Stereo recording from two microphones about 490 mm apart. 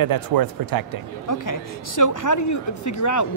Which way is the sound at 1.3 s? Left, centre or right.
Left.